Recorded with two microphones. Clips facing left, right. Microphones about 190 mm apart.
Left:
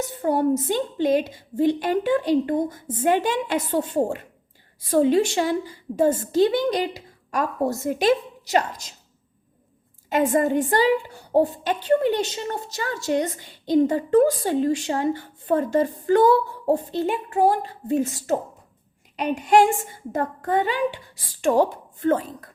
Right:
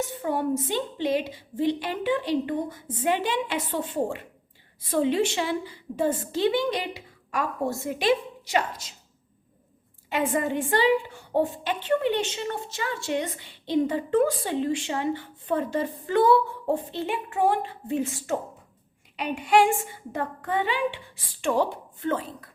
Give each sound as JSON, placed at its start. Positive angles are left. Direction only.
{"t": 0.0, "sound": "a woman's voice", "side_deg": 40}
{"t": 10.1, "sound": "a woman's voice", "side_deg": 45}